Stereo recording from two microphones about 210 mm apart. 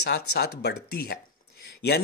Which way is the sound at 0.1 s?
50° left (ahead or behind).